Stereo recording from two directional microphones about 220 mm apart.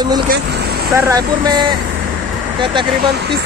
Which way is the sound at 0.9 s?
15° right (ahead or behind).